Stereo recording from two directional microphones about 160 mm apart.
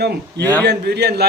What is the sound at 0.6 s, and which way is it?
Speech, 90° right.